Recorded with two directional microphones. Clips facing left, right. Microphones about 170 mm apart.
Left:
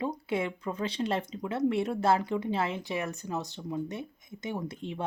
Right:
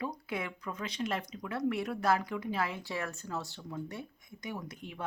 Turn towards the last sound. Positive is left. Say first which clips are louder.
# left 6 dB
turn(degrees=25)  # may be behind; listen again after turning